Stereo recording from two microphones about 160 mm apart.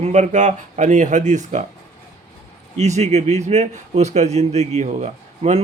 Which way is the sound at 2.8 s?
45° right (ahead or behind).